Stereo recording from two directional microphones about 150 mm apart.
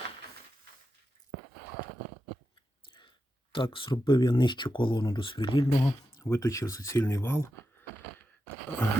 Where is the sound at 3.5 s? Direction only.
35° left (ahead or behind).